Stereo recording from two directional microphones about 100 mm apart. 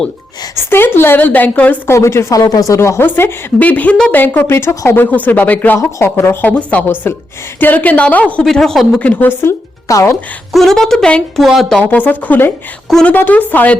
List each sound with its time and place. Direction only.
0.7 s a woman's voice: 20° left (ahead or behind)
1.9 s a woman's voice: 25° left (ahead or behind)
4.9 s a woman's voice: 15° left (ahead or behind)
8.4 s a woman's voice: 5° left (ahead or behind)
9.0 s a woman's voice: 15° left (ahead or behind)
9.4 s speech: 25° left (ahead or behind)
10.5 s a woman's voice: centre (ahead or behind)
11.8 s a woman's voice: 15° left (ahead or behind)
13.1 s a woman's voice: 20° left (ahead or behind)